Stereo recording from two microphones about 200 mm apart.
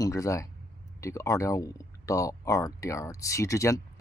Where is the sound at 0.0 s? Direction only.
15° left (ahead or behind).